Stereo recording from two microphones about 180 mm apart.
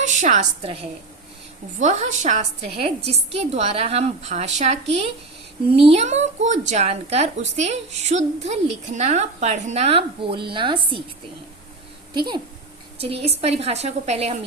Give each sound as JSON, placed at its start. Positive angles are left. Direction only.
{"t": 0.0, "sound": "a woman's voice", "side_deg": -45}
{"t": 12.1, "sound": "a woman's voice", "side_deg": -25}